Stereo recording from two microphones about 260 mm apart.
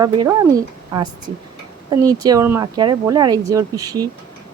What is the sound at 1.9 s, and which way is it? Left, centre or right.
Speech, centre.